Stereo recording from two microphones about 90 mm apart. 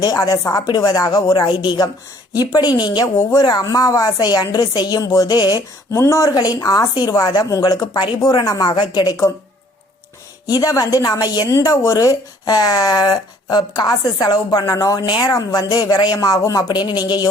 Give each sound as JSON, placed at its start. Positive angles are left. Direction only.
{"t": 0.0, "sound": "speech", "side_deg": 40}
{"t": 2.3, "sound": "speech", "side_deg": 45}
{"t": 5.9, "sound": "speech", "side_deg": 30}
{"t": 6.3, "sound": "speech", "side_deg": 45}
{"t": 10.6, "sound": "speech", "side_deg": 40}
{"t": 16.6, "sound": "speech", "side_deg": 55}